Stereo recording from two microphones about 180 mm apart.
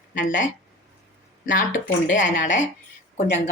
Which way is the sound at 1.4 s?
45° left (ahead or behind).